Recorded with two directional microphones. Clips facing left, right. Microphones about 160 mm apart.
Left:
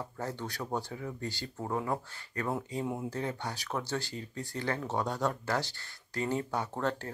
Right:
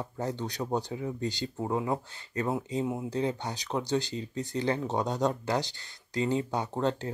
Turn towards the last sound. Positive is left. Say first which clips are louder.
# right 4 dB
turn(degrees=-20)  # may be behind; listen again after turning